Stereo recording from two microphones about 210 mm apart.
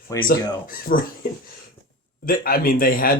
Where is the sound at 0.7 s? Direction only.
40° left (ahead or behind).